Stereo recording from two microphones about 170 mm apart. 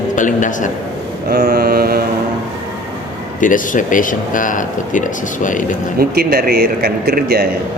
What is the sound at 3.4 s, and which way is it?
A man's voice, 50° left (ahead or behind).